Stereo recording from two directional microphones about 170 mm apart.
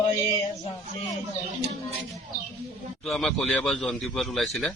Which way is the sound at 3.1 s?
Centre (ahead or behind).